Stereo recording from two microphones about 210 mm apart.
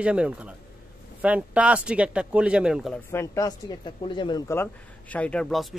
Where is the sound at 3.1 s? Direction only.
15° left (ahead or behind).